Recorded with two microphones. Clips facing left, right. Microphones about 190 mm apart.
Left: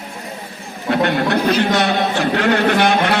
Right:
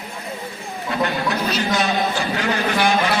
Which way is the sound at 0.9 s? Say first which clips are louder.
Left 6 dB; 65° left (ahead or behind).